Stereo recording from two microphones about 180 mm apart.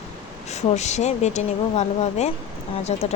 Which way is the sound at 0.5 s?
40° left (ahead or behind).